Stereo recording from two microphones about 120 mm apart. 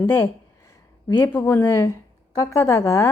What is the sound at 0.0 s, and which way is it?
A woman's voice, 20° left (ahead or behind).